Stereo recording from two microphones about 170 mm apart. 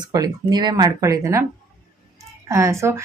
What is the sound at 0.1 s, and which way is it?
Speech, 25° right (ahead or behind).